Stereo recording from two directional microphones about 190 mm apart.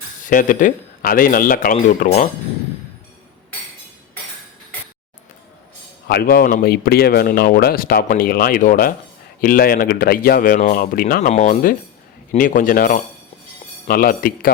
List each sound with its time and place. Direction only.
0.3 s speech: 45° left (ahead or behind)
6.1 s speech: 55° left (ahead or behind)
11.3 s speech: 40° left (ahead or behind)